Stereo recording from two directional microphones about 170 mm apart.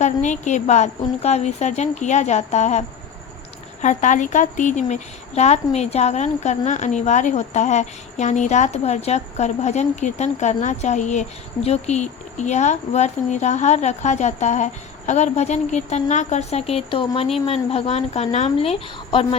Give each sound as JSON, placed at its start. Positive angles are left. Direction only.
{"t": 0.0, "sound": "a woman's voice", "side_deg": 45}